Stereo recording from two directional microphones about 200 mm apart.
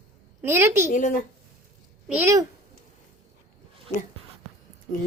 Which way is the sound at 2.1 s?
10° right (ahead or behind).